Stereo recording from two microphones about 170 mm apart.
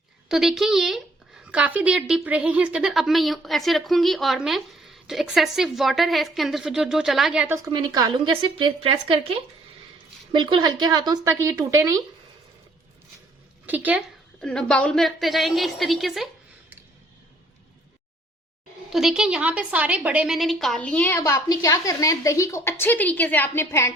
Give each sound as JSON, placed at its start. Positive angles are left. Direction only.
{"t": 0.3, "sound": "a woman's voice", "side_deg": 0}
{"t": 7.4, "sound": "a woman's voice", "side_deg": -15}
{"t": 13.7, "sound": "a woman's voice", "side_deg": -10}
{"t": 14.4, "sound": "a woman's voice", "side_deg": 5}
{"t": 18.9, "sound": "a woman's voice", "side_deg": 0}
{"t": 21.2, "sound": "a woman's voice", "side_deg": 20}